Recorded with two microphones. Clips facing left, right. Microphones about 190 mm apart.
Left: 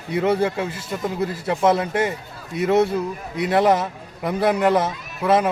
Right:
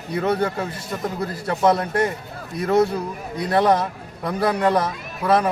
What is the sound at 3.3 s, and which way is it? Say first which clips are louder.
A man's voice: left 1 dB; 5° left (ahead or behind).